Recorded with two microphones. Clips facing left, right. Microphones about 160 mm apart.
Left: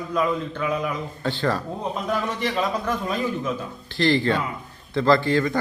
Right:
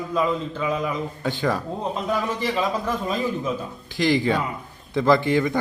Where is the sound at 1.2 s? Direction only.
15° right (ahead or behind).